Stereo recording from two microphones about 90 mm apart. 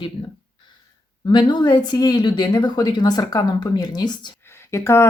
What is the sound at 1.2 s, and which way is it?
A woman's voice, 55° left (ahead or behind).